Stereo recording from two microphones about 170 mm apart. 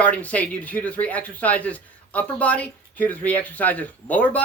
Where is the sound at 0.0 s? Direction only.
10° left (ahead or behind).